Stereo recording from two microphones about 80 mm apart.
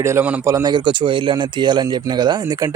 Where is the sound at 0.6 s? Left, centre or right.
Right.